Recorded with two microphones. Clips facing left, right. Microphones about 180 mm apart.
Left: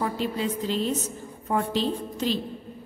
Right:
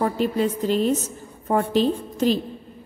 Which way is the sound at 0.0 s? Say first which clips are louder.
Right 6 dB; 50° right (ahead or behind).